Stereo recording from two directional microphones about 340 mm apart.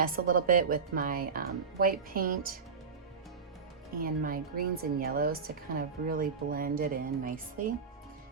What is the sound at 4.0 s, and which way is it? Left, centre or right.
A woman's voice, right.